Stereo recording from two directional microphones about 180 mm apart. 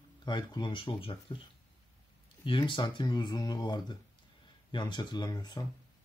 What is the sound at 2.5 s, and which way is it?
Speech, 25° left (ahead or behind).